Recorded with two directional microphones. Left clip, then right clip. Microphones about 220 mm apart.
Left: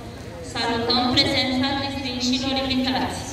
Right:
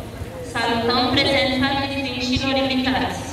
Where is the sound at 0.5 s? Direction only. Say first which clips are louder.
Right 2 dB; 25° right (ahead or behind).